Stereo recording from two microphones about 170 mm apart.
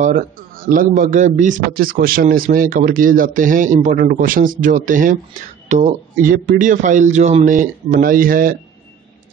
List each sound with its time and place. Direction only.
0.7 s a man's voice: 55° right (ahead or behind)
6.3 s a man's voice: 55° right (ahead or behind)